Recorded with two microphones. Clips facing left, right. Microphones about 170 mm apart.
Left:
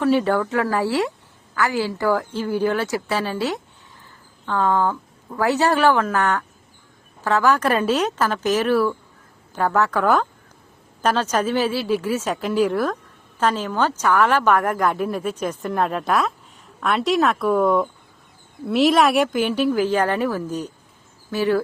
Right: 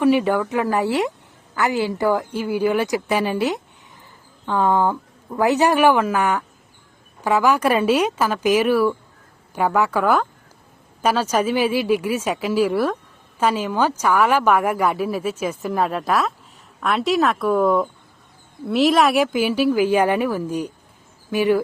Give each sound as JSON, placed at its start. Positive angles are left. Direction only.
{"t": 0.0, "sound": "a woman's voice", "side_deg": -15}